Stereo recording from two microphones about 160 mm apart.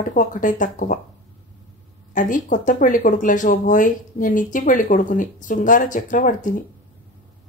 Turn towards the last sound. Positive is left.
turn(degrees=55)  # may be behind; listen again after turning